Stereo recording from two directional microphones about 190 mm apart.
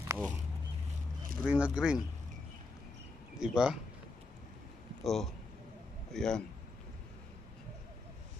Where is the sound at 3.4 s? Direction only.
5° right (ahead or behind).